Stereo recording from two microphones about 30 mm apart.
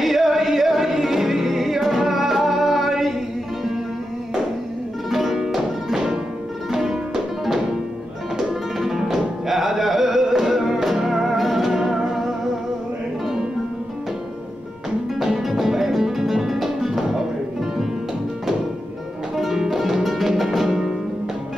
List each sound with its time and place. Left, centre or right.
0.0 s music: centre
5.1 s music: centre
8.7 s music: centre
15.1 s music: centre
19.3 s music: centre
20.6 s flamenco: centre